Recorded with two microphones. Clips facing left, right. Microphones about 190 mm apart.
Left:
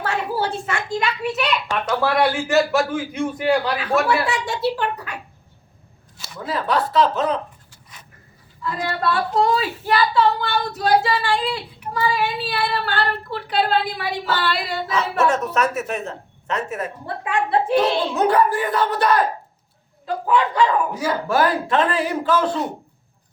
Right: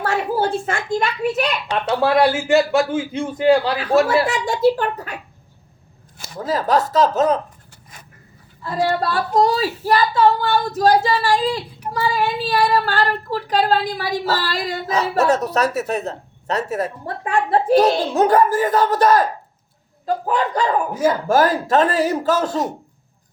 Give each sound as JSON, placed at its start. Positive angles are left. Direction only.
{"t": 0.0, "sound": "a child's voice", "side_deg": -45}
{"t": 1.7, "sound": "a man's voice", "side_deg": -30}
{"t": 4.3, "sound": "speech", "side_deg": -50}
{"t": 6.1, "sound": "speech", "side_deg": -45}
{"t": 8.6, "sound": "speech", "side_deg": -35}